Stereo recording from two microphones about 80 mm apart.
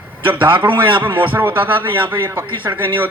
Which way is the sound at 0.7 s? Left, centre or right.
Right.